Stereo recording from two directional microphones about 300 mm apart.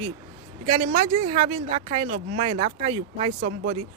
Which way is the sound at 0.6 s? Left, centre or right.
Right.